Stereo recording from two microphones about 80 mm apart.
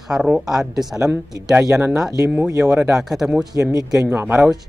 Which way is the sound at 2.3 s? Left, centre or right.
Centre.